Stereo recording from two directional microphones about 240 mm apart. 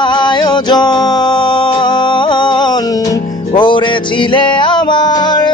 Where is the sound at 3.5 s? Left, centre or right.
Centre.